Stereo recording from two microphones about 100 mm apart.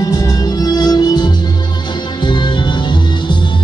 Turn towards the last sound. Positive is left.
turn(degrees=50)  # may be behind; listen again after turning